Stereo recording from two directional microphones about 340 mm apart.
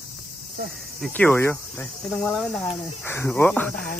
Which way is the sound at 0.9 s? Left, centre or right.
Centre.